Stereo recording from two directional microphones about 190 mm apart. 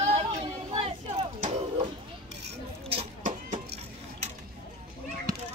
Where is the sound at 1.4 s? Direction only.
40° right (ahead or behind).